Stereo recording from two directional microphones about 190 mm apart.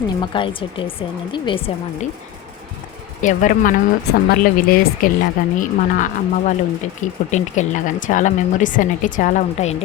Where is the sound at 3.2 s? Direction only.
40° left (ahead or behind).